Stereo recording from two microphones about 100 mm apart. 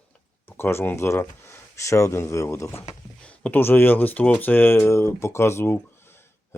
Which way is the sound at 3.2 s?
15° left (ahead or behind).